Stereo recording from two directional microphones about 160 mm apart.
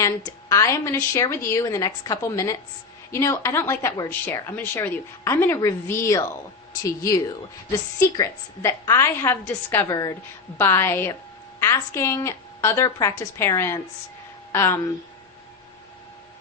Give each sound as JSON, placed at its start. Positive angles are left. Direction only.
{"t": 0.0, "sound": "a woman's voice", "side_deg": 20}
{"t": 7.9, "sound": "a woman's voice", "side_deg": 20}